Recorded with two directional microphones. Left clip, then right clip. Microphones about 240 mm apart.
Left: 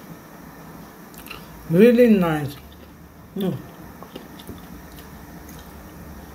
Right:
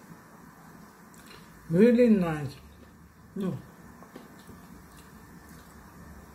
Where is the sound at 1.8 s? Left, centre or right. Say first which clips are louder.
Left 7 dB; centre.